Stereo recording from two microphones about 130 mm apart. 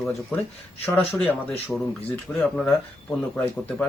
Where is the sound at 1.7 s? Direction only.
5° right (ahead or behind).